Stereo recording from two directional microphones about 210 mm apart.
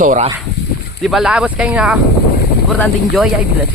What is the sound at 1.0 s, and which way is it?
Speech, centre (ahead or behind).